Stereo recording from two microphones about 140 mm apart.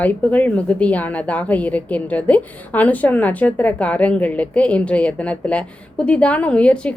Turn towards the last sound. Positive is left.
turn(degrees=10)  # may be behind; listen again after turning